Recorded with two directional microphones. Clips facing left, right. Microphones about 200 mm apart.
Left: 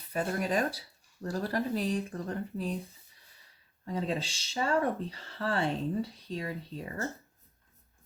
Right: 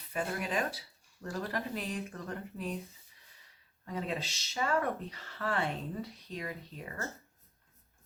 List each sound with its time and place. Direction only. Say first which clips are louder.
0.1 s speech: left 4 dB; 40° left (ahead or behind)
3.8 s speech: left 4 dB; 30° left (ahead or behind)